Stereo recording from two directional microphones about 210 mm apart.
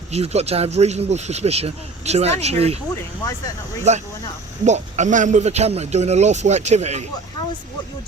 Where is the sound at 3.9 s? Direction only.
35° right (ahead or behind).